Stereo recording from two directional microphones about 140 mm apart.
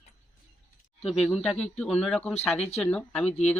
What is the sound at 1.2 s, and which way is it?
Speech, centre (ahead or behind).